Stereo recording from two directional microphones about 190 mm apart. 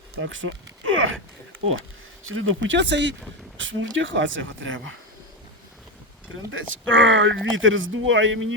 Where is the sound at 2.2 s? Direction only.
90° right; by 3.2 s 70° right (ahead or behind).